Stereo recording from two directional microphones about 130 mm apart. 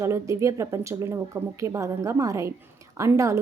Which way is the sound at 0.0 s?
25° right (ahead or behind).